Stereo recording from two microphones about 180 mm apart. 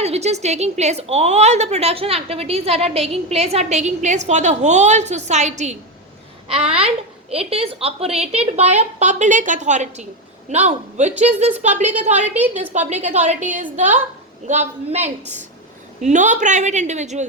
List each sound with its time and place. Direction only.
0.0 s a woman's voice: 35° right (ahead or behind)
12.4 s a woman's voice: 10° right (ahead or behind)
12.9 s a woman's voice: 40° right (ahead or behind)